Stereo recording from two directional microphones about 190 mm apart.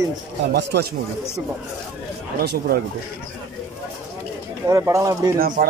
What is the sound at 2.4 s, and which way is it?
Speech, 55° right (ahead or behind).